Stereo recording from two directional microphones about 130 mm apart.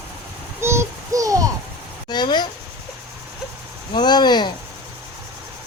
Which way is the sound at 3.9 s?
35° left (ahead or behind).